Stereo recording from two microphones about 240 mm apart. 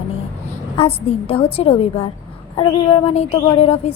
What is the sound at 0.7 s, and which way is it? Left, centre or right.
A woman's voice, left.